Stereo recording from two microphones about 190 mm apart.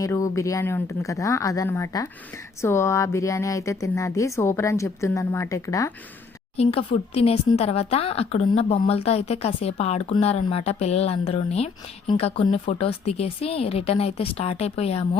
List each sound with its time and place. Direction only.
0.0 s speech: 15° left (ahead or behind)
6.6 s speech: 30° left (ahead or behind)